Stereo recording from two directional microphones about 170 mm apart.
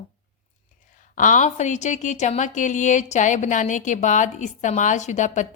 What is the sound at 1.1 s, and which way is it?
A woman's voice, 50° left (ahead or behind).